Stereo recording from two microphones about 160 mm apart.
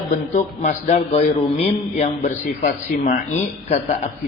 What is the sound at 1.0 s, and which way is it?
Speech, 35° left (ahead or behind).